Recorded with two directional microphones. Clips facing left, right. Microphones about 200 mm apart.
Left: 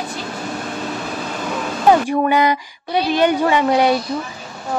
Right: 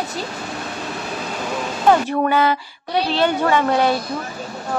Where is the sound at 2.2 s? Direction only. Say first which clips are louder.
Left 1 dB; 15° left (ahead or behind).